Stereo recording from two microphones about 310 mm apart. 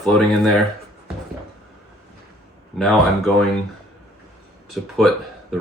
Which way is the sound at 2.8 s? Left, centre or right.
Centre.